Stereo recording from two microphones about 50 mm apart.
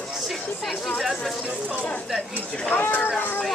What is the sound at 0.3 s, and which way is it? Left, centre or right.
Speech, centre.